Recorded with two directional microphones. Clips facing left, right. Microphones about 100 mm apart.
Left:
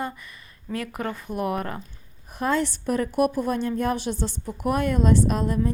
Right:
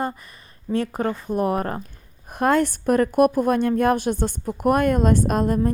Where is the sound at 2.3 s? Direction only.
55° right (ahead or behind).